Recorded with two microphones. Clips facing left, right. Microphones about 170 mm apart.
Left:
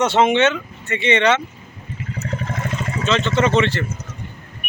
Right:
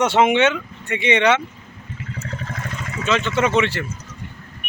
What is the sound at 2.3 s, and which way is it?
Vehicle, 25° left (ahead or behind).